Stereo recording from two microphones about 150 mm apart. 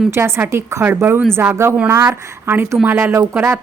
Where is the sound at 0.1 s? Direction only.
15° right (ahead or behind).